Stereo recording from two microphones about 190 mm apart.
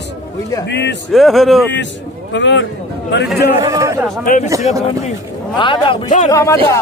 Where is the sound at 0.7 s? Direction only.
65° left (ahead or behind).